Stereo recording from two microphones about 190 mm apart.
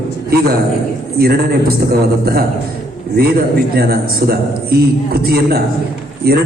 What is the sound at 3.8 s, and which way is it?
A man's voice, 50° right (ahead or behind).